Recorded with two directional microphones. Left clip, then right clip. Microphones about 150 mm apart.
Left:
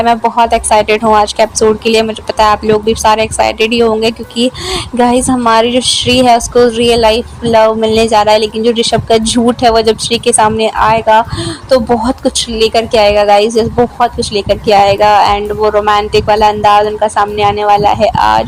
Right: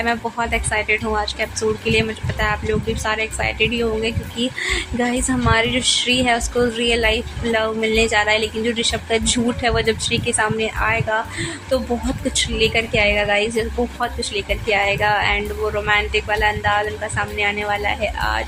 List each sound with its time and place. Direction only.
0.0 s speech: 50° left (ahead or behind)
12.5 s speech: 55° left (ahead or behind)